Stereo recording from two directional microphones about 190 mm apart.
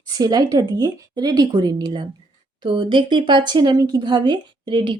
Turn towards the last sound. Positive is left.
turn(degrees=-25)  # may be behind; listen again after turning